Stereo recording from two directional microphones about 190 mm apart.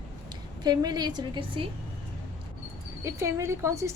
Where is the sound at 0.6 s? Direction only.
20° right (ahead or behind).